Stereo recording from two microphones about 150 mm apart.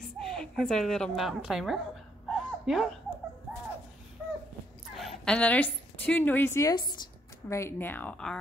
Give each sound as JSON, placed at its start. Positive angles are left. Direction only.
{"t": 0.2, "sound": "a woman's voice", "side_deg": 5}
{"t": 2.2, "sound": "dog", "side_deg": 0}
{"t": 4.9, "sound": "a woman's voice", "side_deg": 5}
{"t": 6.7, "sound": "speech", "side_deg": 30}
{"t": 7.4, "sound": "speech", "side_deg": 20}